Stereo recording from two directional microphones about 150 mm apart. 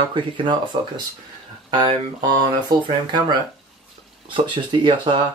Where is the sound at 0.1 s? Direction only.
30° right (ahead or behind).